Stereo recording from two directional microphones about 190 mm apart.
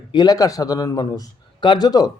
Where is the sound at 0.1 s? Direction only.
20° left (ahead or behind).